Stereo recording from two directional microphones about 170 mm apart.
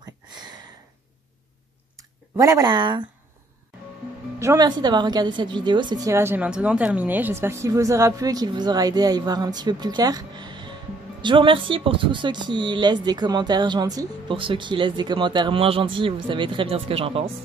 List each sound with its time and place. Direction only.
0.0 s a sound: 25° right (ahead or behind)
2.3 s a woman's voice: 20° right (ahead or behind)
4.4 s a woman's voice: 20° right (ahead or behind)